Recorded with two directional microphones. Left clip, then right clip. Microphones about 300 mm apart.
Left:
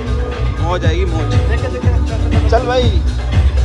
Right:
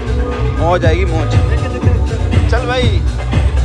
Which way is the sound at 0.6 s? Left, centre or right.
Centre.